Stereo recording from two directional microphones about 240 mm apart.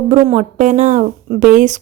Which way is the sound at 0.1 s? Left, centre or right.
Right.